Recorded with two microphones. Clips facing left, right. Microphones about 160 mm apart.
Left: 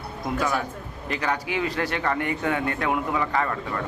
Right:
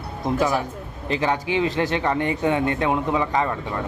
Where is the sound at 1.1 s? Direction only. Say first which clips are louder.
Right 5 dB; 25° right (ahead or behind).